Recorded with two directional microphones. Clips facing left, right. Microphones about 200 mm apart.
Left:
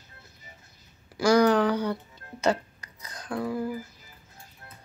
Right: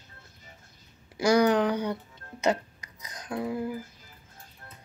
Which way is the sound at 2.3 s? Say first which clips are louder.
Left 1 dB; 20° right (ahead or behind).